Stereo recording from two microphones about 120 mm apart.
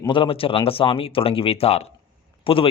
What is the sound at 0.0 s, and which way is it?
A man's voice, 45° left (ahead or behind).